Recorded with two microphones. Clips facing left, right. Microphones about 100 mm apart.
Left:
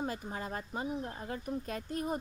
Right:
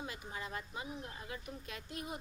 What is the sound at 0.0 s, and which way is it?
A woman's voice, 40° left (ahead or behind).